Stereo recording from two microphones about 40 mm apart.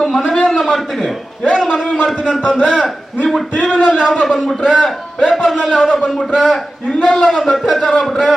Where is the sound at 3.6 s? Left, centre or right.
Centre.